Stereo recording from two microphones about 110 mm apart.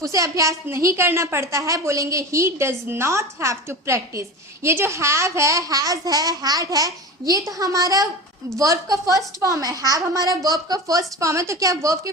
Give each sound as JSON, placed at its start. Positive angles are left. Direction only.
{"t": 0.0, "sound": "a woman's voice", "side_deg": -30}